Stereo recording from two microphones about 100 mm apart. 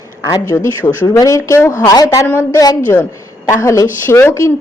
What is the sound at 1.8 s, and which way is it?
A woman's voice, 40° left (ahead or behind).